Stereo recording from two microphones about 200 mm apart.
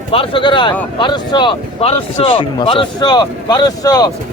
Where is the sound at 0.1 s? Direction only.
25° left (ahead or behind).